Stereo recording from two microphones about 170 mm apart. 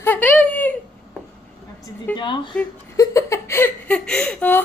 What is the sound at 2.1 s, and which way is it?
Speech, 25° left (ahead or behind).